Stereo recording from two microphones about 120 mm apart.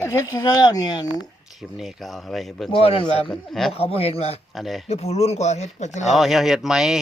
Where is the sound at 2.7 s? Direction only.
50° left (ahead or behind).